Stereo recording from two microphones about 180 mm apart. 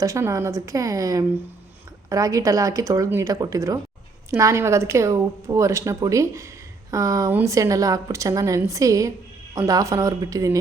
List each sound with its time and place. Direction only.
0.0 s speech: 15° right (ahead or behind)